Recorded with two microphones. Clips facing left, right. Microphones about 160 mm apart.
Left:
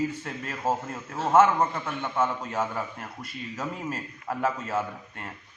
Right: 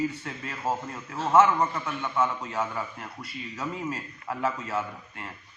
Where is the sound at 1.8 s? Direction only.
50° left (ahead or behind).